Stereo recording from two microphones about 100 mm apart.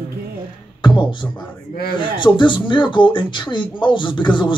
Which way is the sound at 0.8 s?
50° left (ahead or behind).